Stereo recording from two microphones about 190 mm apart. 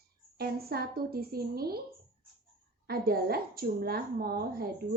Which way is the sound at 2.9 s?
55° right (ahead or behind).